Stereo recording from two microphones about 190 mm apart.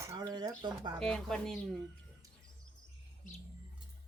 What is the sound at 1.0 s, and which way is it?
Speech, 5° left (ahead or behind).